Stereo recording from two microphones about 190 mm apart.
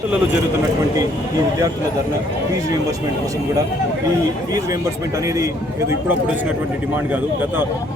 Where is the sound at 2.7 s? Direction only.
20° right (ahead or behind).